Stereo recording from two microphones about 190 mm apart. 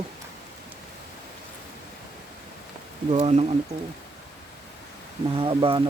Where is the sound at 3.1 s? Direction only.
35° right (ahead or behind).